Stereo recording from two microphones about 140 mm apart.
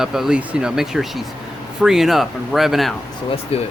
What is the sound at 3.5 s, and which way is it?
Speech, 45° left (ahead or behind).